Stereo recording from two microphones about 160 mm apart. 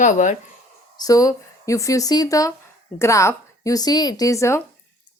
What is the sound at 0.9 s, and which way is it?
Speech, 20° left (ahead or behind).